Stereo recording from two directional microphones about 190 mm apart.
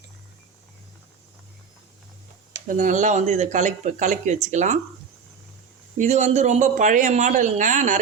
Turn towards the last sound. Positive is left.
turn(degrees=-40)  # may be behind; listen again after turning